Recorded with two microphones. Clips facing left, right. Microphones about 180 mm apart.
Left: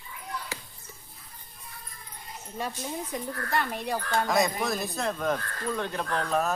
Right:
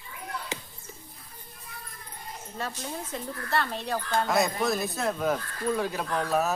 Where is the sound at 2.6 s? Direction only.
15° left (ahead or behind).